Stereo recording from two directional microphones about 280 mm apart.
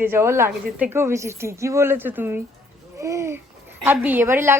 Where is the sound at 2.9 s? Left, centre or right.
Centre.